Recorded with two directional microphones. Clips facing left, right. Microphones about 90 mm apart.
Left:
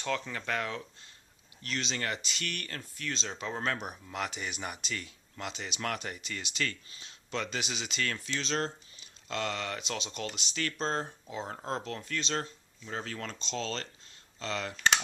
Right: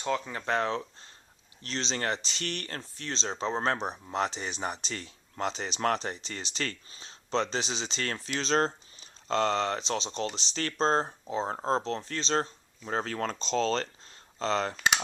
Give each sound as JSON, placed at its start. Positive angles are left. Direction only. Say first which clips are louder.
{"t": 0.0, "sound": "speech", "louder": "right 3 dB", "side_deg": -20}